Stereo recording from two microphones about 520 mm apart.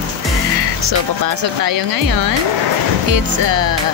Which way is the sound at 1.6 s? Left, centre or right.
Right.